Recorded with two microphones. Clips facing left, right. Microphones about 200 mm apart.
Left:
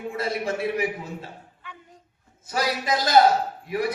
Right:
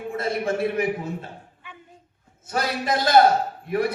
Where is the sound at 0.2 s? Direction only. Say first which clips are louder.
Right 2 dB; 50° right (ahead or behind).